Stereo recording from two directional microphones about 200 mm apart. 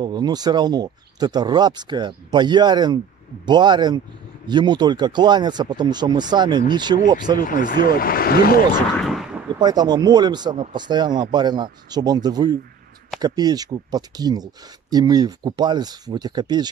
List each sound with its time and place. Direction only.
0.0 s speech: 20° right (ahead or behind)
7.4 s speech: 45° left (ahead or behind)
9.0 s artillery fire: centre (ahead or behind)
9.6 s speech: 20° right (ahead or behind)